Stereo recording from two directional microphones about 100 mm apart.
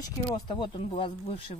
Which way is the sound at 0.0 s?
50° left (ahead or behind).